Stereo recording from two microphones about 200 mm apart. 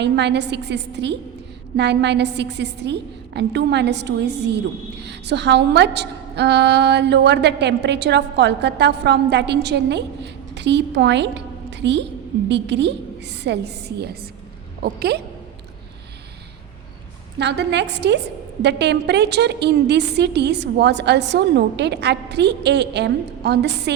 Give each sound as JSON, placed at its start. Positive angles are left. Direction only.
{"t": 0.0, "sound": "a woman's voice", "side_deg": -60}
{"t": 17.3, "sound": "a woman's voice", "side_deg": -60}